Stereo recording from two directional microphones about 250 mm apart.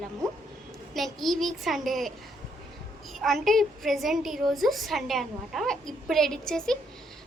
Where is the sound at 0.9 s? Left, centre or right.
Centre.